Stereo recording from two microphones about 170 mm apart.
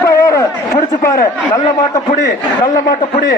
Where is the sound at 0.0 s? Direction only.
20° left (ahead or behind).